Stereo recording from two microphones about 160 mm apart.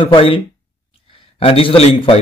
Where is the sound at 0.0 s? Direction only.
35° left (ahead or behind).